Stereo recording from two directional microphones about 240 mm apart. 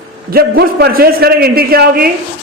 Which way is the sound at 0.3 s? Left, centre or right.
Right.